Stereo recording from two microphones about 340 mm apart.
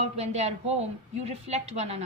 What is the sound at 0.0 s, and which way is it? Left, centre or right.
A woman's voice, centre.